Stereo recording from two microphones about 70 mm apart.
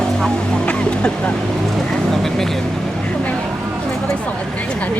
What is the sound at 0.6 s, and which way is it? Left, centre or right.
Vehicle, centre.